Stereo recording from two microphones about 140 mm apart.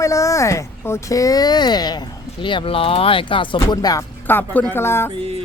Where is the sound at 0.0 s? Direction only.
20° left (ahead or behind).